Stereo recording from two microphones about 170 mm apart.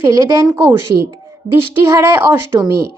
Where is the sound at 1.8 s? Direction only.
15° right (ahead or behind).